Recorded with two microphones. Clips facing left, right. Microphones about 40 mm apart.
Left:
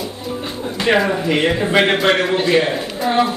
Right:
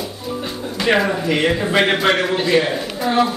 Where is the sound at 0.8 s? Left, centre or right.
Centre.